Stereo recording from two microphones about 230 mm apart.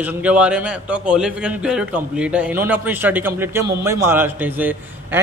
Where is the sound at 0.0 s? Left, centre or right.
Centre.